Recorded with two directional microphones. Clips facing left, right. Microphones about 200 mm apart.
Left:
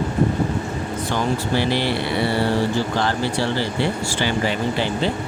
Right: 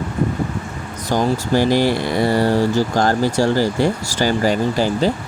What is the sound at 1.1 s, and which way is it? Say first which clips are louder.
Speech: right 5 dB; 45° right (ahead or behind).